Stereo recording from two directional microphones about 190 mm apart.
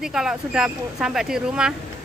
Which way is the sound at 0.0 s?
5° right (ahead or behind).